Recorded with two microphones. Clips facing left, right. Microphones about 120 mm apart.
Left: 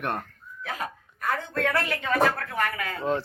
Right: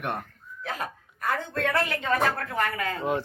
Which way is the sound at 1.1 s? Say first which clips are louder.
Even; 20° right (ahead or behind).